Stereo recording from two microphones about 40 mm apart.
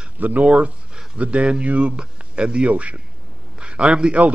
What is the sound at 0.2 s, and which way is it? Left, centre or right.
A man's voice, right.